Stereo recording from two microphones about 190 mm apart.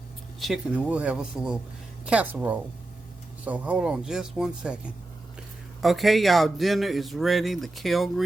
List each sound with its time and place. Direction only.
0.3 s speech: centre (ahead or behind)
5.8 s speech: centre (ahead or behind)